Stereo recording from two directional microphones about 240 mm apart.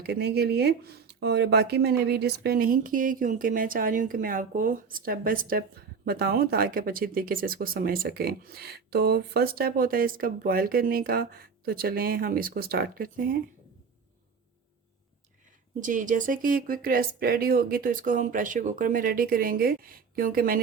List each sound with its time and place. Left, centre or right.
0.0 s speech: right
15.8 s speech: right